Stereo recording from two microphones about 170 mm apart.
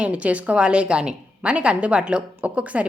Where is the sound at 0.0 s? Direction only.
5° right (ahead or behind).